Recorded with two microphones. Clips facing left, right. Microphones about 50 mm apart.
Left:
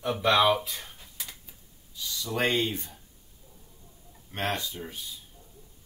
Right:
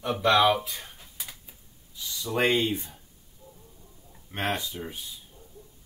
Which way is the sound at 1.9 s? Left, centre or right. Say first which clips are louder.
Right 2 dB; right.